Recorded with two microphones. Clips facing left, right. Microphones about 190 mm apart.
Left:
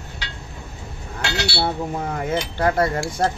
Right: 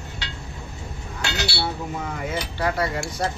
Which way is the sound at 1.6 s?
45° left (ahead or behind).